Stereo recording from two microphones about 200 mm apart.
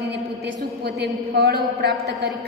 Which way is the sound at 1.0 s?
55° right (ahead or behind).